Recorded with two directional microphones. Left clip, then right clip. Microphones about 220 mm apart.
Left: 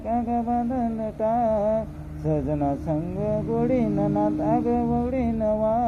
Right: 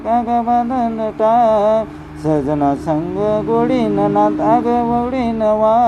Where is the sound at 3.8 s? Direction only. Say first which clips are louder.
Right 10 dB; 50° right (ahead or behind).